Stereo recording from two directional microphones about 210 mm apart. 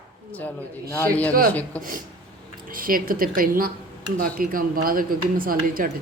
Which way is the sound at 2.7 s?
40° right (ahead or behind).